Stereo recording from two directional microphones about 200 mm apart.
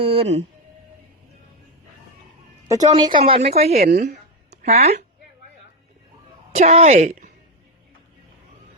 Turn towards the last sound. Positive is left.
turn(degrees=-40)  # may be behind; listen again after turning